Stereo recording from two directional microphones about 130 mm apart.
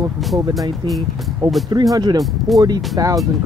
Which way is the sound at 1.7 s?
30° right (ahead or behind).